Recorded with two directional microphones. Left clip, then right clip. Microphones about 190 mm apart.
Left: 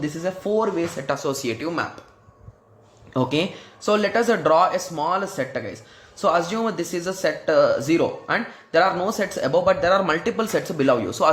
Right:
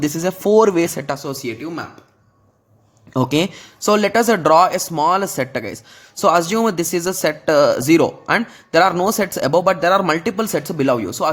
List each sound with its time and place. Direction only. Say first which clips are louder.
0.0 s speech: right 7 dB; 50° right (ahead or behind); by 1.4 s 30° right (ahead or behind)
1.4 s speech: left 1 dB; 15° right (ahead or behind)
3.1 s a man's voice: right 4 dB; 40° right (ahead or behind)